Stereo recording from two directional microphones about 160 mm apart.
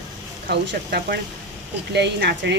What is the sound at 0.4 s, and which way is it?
Speech, 80° right.